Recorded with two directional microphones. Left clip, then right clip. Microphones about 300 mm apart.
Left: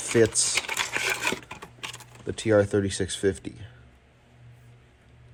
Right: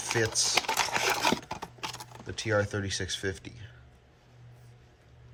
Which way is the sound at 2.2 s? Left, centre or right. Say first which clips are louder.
Left 7 dB; centre.